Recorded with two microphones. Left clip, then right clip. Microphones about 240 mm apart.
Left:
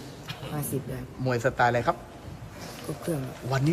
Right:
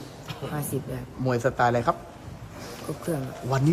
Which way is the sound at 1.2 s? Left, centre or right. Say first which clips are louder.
Right 1 dB; centre.